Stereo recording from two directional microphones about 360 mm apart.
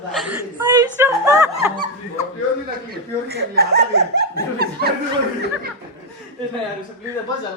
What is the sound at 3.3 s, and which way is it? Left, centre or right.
Speech, right.